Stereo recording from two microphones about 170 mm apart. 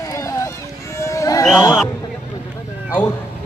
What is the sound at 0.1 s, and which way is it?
Run, 20° left (ahead or behind).